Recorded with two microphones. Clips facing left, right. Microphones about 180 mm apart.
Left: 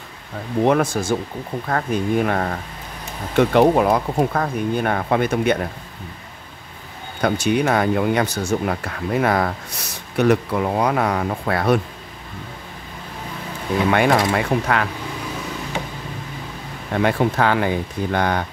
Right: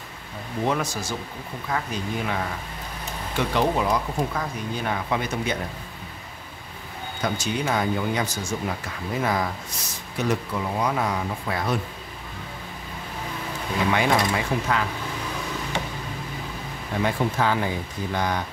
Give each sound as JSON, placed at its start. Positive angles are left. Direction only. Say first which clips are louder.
{"t": 0.7, "sound": "speech", "louder": "left 8 dB", "side_deg": 55}
{"t": 7.2, "sound": "speech", "louder": "left 8 dB", "side_deg": 60}
{"t": 13.8, "sound": "speech", "louder": "left 5 dB", "side_deg": 60}
{"t": 17.0, "sound": "speech", "louder": "left 5 dB", "side_deg": 65}